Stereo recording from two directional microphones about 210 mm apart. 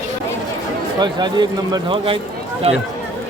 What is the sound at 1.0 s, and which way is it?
Speech, 20° right (ahead or behind).